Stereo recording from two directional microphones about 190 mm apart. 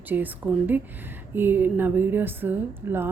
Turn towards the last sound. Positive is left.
turn(degrees=-10)  # may be behind; listen again after turning